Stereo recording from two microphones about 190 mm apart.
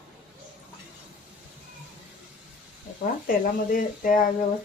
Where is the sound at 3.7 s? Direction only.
45° left (ahead or behind).